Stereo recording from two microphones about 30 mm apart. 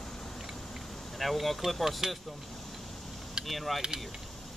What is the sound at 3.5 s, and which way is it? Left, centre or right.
Speech, centre.